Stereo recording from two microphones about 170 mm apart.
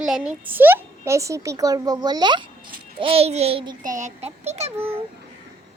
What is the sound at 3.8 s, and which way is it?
Speech, 50° right (ahead or behind).